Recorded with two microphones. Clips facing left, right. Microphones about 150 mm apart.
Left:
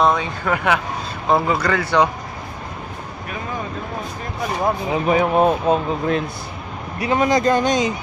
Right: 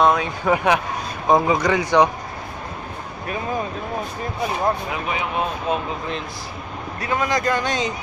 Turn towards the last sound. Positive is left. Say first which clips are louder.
# left 5 dB
turn(degrees=20)  # may be behind; listen again after turning